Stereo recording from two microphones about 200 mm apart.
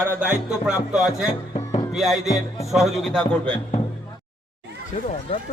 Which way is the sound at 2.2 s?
15° left (ahead or behind).